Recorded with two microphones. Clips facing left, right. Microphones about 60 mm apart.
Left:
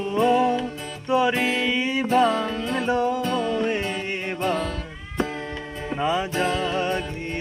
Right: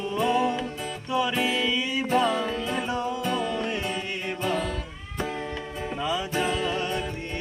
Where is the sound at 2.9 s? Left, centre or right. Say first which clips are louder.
Left 6 dB; left.